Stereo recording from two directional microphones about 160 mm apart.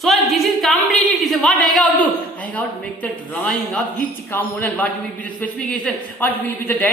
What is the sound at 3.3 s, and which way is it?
A woman's voice, 5° left (ahead or behind).